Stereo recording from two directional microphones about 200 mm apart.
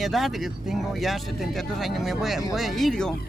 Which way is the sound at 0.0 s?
Centre (ahead or behind).